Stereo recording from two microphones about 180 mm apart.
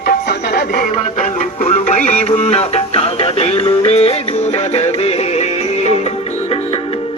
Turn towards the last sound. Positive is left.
turn(degrees=35)  # may be behind; listen again after turning